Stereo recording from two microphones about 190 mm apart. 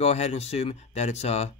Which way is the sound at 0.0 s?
35° left (ahead or behind).